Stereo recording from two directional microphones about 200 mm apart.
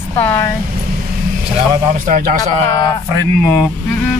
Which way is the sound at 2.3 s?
20° left (ahead or behind).